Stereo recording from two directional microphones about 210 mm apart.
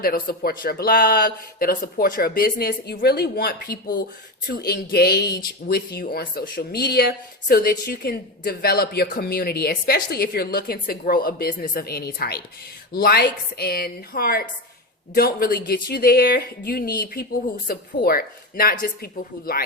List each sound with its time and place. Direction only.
0.0 s speech: 45° left (ahead or behind)